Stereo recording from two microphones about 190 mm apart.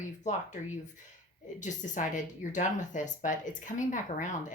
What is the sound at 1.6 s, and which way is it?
Speech, 40° left (ahead or behind).